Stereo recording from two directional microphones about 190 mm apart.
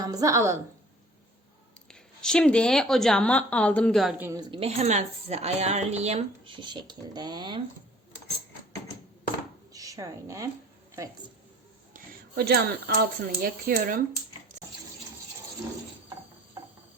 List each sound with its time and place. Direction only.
0.0 s a woman's voice: 20° right (ahead or behind)
1.9 s speech: 5° left (ahead or behind)
4.2 s a woman's voice: 15° right (ahead or behind)
4.5 s a woman's voice: 30° right (ahead or behind)
9.7 s a woman's voice: 15° right (ahead or behind)
11.9 s a sound: 45° right (ahead or behind)
12.3 s speech: 55° right (ahead or behind)